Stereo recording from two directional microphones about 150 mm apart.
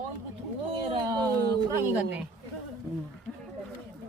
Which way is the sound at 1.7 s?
10° right (ahead or behind).